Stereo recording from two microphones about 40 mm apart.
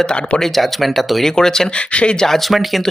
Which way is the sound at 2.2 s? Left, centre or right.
Centre.